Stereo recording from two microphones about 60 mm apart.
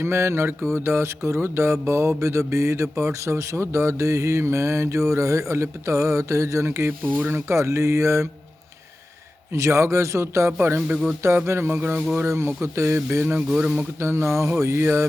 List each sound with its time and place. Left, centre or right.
0.0 s mantra: right
9.5 s a man's voice: right
10.6 s speech: right
10.8 s speech: centre
11.4 s speech: right
12.2 s mantra: right